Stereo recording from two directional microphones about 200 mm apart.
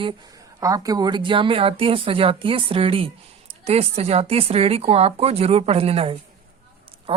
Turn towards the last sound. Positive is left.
turn(degrees=-30)  # may be behind; listen again after turning